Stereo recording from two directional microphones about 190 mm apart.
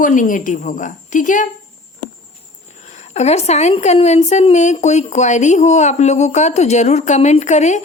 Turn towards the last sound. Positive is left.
turn(degrees=40)  # may be behind; listen again after turning